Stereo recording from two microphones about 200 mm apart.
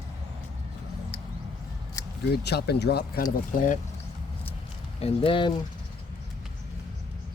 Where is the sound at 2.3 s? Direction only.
55° left (ahead or behind).